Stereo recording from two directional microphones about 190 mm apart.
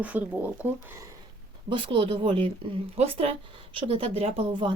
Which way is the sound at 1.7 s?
25° right (ahead or behind).